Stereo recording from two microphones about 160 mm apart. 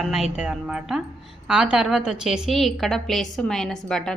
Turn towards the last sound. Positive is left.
turn(degrees=5)  # may be behind; listen again after turning